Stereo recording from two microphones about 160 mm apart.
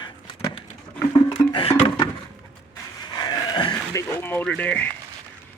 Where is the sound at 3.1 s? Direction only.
25° left (ahead or behind); by 4.9 s 10° left (ahead or behind).